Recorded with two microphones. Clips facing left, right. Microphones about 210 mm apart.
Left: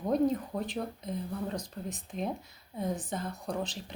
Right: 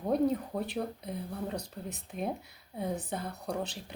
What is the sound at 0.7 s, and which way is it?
Speech, 10° right (ahead or behind).